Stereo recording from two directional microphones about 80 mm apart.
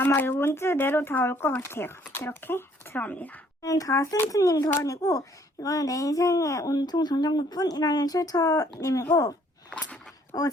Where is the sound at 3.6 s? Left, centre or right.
Left.